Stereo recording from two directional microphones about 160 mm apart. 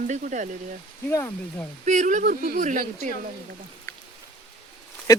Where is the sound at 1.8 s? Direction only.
50° right (ahead or behind).